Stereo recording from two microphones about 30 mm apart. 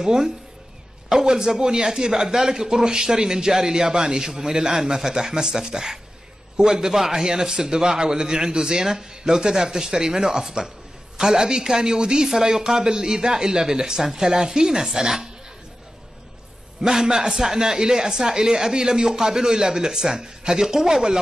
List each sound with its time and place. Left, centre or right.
0.0 s speech: right
16.9 s speech: centre